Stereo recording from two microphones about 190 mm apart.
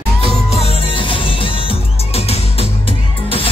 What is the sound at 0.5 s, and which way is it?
Music, 30° left (ahead or behind).